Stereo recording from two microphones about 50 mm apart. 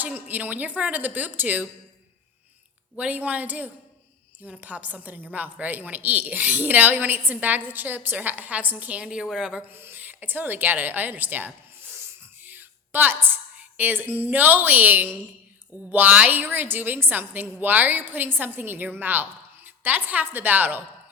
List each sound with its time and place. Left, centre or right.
0.0 s a woman's voice: right
3.0 s a woman's voice: right
9.0 s a woman's voice: centre
9.7 s a woman's voice: right
12.4 s a sound: right
13.6 s a woman's voice: right